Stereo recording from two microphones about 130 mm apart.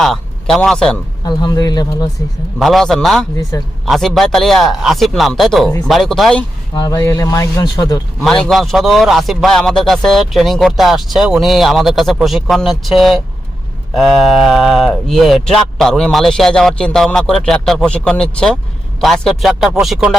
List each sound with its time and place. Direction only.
0.0 s a man's voice: centre (ahead or behind)
1.2 s speech: 30° left (ahead or behind)
2.6 s a man's voice: centre (ahead or behind)
3.5 s speech: 30° left (ahead or behind)
3.8 s a man's voice: centre (ahead or behind)
6.7 s speech: 30° left (ahead or behind)
8.2 s a man's voice: 5° left (ahead or behind)